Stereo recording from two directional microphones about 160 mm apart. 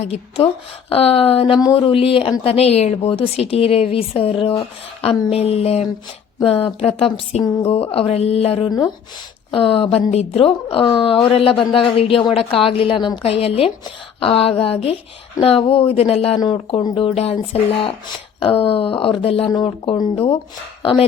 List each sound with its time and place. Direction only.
0.0 s speech: 40° left (ahead or behind)